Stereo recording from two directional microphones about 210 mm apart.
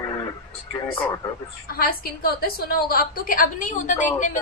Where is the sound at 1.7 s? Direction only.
45° left (ahead or behind).